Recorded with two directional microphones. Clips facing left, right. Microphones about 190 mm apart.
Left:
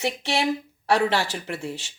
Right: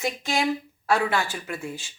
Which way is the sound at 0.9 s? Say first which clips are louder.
Left 2 dB; 80° left.